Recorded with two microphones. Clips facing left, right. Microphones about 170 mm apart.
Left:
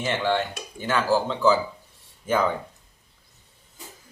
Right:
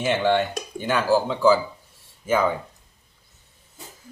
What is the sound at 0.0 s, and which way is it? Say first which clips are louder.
Speech: right 4 dB; 20° right (ahead or behind).